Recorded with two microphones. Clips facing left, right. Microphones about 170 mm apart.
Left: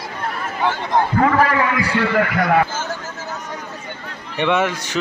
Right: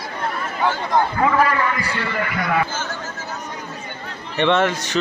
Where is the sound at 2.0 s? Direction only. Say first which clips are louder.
Left 6 dB; 60° left (ahead or behind).